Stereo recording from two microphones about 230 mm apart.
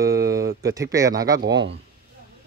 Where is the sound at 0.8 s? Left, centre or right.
Centre.